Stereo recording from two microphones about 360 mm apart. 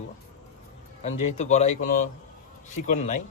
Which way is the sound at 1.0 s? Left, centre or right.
Centre.